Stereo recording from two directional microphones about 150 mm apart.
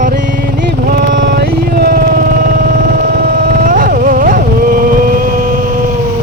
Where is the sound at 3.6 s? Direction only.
65° right (ahead or behind).